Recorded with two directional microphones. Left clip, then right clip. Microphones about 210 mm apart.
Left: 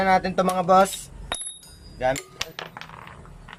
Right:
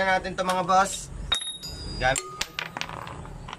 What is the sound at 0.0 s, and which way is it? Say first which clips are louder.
Speech: left 4 dB; 40° left (ahead or behind).